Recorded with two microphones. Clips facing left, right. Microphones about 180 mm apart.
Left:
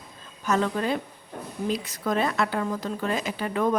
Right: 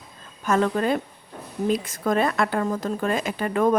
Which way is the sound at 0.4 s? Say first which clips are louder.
Right 3 dB; 50° right (ahead or behind).